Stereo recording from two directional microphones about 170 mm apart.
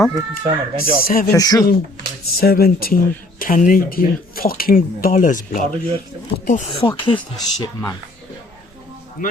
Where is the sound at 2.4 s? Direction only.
60° left (ahead or behind).